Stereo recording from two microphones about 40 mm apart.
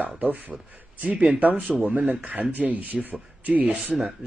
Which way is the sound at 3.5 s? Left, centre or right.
Right.